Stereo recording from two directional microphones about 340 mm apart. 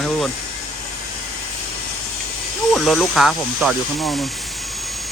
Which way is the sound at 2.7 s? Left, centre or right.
Centre.